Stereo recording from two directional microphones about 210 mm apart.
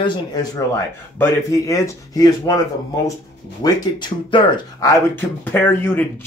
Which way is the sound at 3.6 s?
20° left (ahead or behind).